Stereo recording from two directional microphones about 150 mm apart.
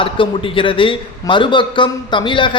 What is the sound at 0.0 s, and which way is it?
A man's voice, 35° left (ahead or behind).